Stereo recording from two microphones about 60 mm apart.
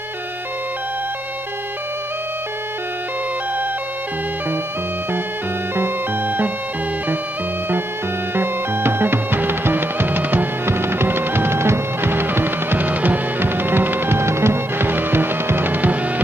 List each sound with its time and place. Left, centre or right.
5.8 s music: right
8.4 s music: right